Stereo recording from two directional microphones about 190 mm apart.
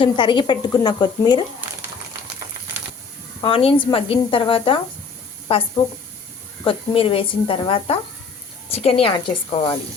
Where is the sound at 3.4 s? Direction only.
30° left (ahead or behind).